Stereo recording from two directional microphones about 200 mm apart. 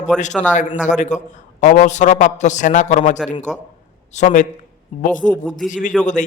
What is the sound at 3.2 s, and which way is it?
Speech, centre (ahead or behind).